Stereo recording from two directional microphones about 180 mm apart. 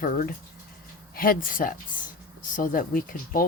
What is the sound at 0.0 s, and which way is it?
Speech, 50° left (ahead or behind).